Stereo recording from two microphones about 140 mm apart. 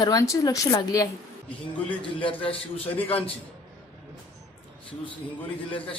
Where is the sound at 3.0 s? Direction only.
40° left (ahead or behind).